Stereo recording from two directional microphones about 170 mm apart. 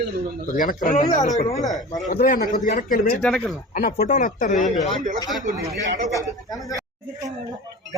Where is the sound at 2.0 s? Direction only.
55° left (ahead or behind).